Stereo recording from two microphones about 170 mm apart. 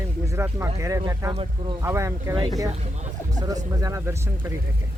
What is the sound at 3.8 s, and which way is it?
Speech, 20° right (ahead or behind).